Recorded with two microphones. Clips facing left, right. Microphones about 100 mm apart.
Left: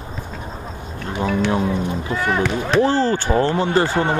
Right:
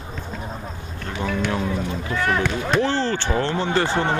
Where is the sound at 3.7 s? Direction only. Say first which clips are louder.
Left 1 dB; 10° left (ahead or behind).